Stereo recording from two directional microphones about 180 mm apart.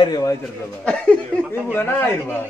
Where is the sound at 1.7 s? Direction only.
10° left (ahead or behind).